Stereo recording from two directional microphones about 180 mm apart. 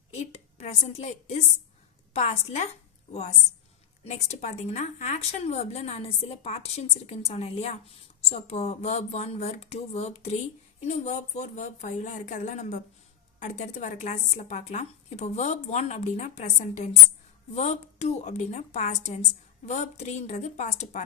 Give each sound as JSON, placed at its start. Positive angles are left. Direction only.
{"t": 0.1, "sound": "a woman's voice", "side_deg": 40}
{"t": 4.0, "sound": "speech", "side_deg": 35}